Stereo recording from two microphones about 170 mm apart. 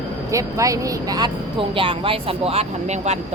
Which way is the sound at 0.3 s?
20° right (ahead or behind).